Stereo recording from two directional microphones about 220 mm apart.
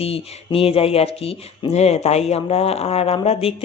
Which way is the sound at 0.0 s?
25° left (ahead or behind).